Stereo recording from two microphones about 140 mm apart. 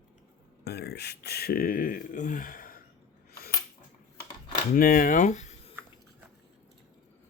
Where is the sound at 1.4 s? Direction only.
90° left.